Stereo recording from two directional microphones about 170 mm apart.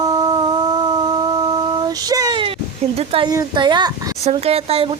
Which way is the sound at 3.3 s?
25° right (ahead or behind).